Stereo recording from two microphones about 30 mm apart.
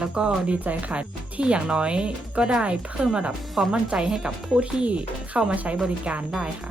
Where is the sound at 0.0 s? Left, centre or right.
Right.